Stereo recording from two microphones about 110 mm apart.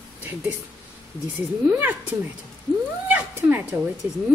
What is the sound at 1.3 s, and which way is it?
Speech, 15° right (ahead or behind).